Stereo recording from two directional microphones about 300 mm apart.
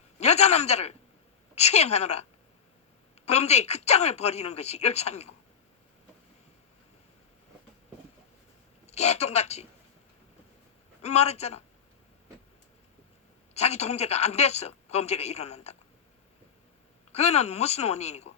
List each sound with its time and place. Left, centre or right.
0.2 s a man's voice: left
3.2 s speech: left
8.9 s speech: left
11.0 s speech: left
13.5 s speech: left
17.1 s speech: left